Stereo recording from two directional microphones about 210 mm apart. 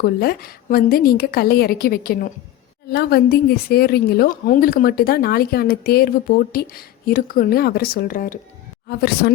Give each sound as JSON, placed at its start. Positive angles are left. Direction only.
{"t": 0.0, "sound": "a woman's voice", "side_deg": 45}